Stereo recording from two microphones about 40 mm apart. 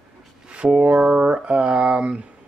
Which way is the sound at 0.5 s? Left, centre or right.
Right.